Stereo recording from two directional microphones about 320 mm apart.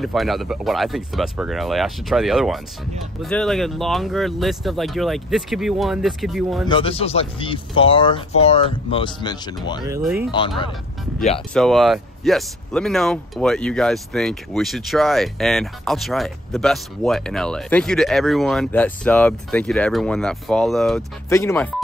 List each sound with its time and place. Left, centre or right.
0.0 s speech: centre
6.7 s speech: centre
9.8 s speech: centre
11.1 s speech: centre
11.5 s speech: centre